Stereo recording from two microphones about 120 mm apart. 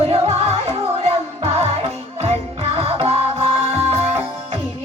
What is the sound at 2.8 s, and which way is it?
Music, 55° right (ahead or behind).